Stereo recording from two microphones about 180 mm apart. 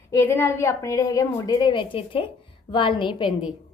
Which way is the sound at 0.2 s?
10° left (ahead or behind).